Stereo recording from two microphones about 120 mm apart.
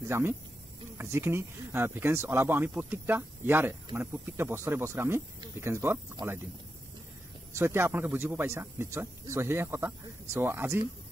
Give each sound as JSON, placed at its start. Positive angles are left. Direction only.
{"t": 0.1, "sound": "speech", "side_deg": -20}
{"t": 7.5, "sound": "speech", "side_deg": -20}